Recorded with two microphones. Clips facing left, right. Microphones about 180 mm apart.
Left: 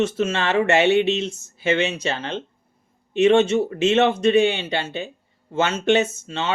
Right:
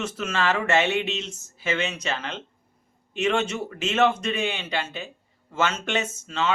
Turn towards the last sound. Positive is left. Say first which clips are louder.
# left 5 dB
turn(degrees=30)  # may be behind; listen again after turning